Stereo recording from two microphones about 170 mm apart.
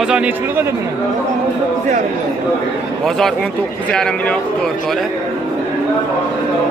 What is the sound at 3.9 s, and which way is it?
Speech, 5° left (ahead or behind).